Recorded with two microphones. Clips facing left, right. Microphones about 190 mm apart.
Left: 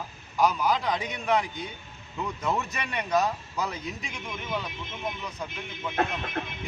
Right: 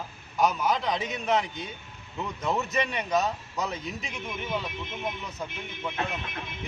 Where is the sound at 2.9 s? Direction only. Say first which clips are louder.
Left 1 dB; centre (ahead or behind).